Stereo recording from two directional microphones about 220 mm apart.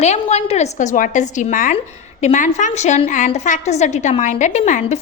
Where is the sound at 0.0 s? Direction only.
30° left (ahead or behind).